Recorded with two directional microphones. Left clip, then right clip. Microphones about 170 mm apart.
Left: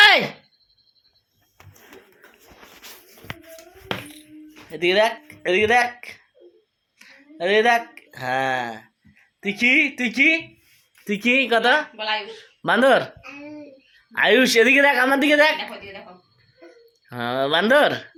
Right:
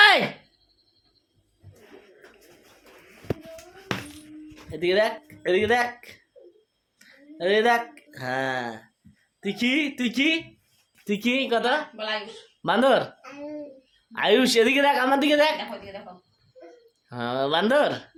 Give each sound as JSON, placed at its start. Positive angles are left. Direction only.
{"t": 4.8, "sound": "a woman's voice", "side_deg": 10}
{"t": 11.0, "sound": "a woman's voice", "side_deg": 5}
{"t": 11.9, "sound": "speech", "side_deg": -20}
{"t": 12.6, "sound": "a woman's voice", "side_deg": 10}
{"t": 14.1, "sound": "a woman's voice", "side_deg": 10}
{"t": 17.1, "sound": "a woman's voice", "side_deg": 5}